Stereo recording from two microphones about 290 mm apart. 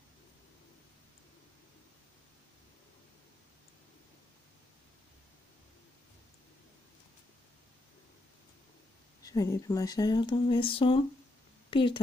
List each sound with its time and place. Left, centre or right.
9.2 s speech: centre